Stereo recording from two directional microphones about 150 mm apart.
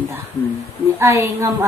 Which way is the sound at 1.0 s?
20° right (ahead or behind).